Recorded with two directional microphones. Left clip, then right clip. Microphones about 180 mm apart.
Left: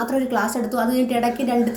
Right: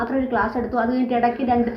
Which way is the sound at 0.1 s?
45° left (ahead or behind).